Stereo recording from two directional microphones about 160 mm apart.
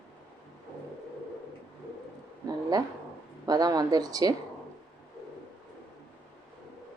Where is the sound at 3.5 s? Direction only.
25° right (ahead or behind).